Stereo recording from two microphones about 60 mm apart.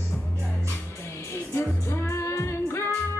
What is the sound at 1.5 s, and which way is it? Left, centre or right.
Music, left.